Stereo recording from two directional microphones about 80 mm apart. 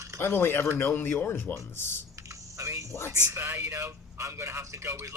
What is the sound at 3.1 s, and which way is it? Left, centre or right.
A man's voice, right.